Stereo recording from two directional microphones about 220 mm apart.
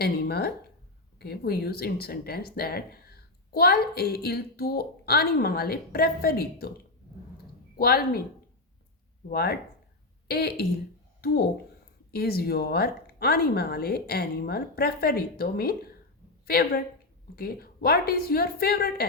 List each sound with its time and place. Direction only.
0.0 s a woman's voice: 45° left (ahead or behind)
7.8 s a woman's voice: 45° left (ahead or behind)
9.3 s a woman's voice: 45° left (ahead or behind)
12.1 s a woman's voice: 45° left (ahead or behind)